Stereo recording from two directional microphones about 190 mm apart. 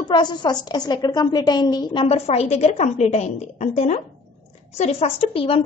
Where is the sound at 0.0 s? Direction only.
25° left (ahead or behind).